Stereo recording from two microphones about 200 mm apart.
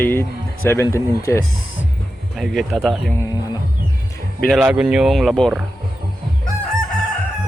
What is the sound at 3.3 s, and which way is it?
Music, 20° left (ahead or behind).